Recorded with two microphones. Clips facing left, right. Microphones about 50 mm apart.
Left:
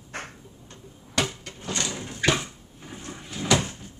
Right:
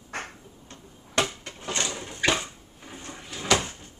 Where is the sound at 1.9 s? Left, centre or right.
Centre.